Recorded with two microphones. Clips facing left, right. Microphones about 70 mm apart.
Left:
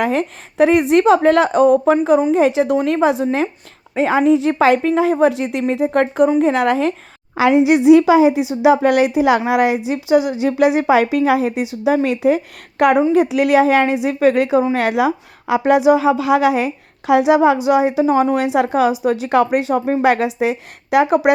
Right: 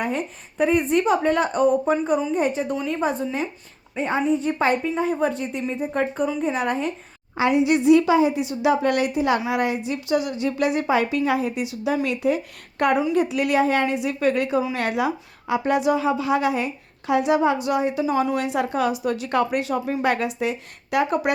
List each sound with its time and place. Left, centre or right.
0.0 s speech: left
7.6 s a woman's voice: left
18.0 s speech: left